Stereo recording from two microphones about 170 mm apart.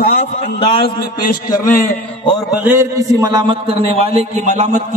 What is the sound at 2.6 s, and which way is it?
Speech, 15° right (ahead or behind).